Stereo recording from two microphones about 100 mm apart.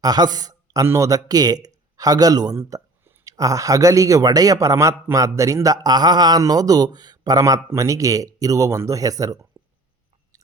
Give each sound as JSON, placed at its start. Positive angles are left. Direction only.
{"t": 0.0, "sound": "a man's voice", "side_deg": -40}
{"t": 2.6, "sound": "a sound", "side_deg": -30}
{"t": 3.2, "sound": "a man's voice", "side_deg": -35}